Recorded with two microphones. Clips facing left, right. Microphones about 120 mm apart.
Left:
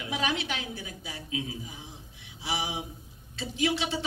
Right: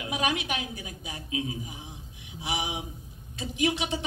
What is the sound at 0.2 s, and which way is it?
A woman's voice, 15° right (ahead or behind).